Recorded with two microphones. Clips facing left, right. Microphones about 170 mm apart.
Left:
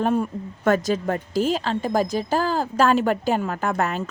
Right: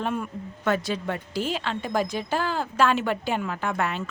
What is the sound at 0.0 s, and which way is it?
A woman's voice, 40° left (ahead or behind).